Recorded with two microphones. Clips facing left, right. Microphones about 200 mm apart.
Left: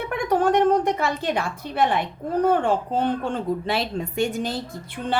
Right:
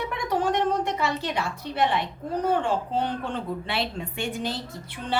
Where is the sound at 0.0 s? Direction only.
55° left (ahead or behind).